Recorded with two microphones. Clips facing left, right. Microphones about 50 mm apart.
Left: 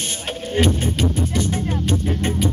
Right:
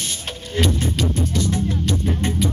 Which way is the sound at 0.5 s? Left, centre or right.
Left.